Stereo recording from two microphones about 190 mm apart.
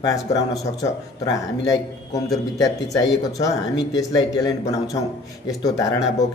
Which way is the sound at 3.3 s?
20° left (ahead or behind).